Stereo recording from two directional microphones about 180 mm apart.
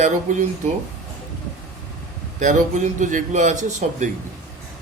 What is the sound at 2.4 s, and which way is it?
A man's voice, 45° right (ahead or behind).